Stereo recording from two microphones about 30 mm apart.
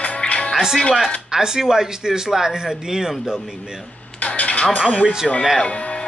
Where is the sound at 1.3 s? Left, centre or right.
Right.